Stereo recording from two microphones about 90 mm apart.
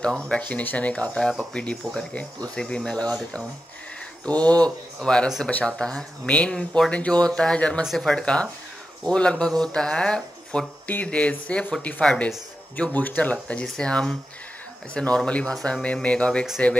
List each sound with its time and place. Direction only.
0.3 s speech: 15° left (ahead or behind)
7.8 s speech: centre (ahead or behind)